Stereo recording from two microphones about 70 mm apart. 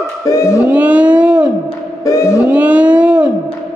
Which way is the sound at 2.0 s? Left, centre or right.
Left.